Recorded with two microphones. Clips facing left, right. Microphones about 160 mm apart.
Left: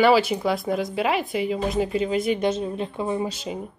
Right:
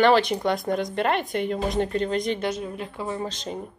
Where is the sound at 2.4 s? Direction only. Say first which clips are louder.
Left 4 dB; 25° left (ahead or behind); by 3.6 s 5° left (ahead or behind).